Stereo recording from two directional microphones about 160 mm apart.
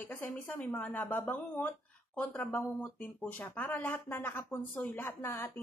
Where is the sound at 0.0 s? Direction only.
10° left (ahead or behind).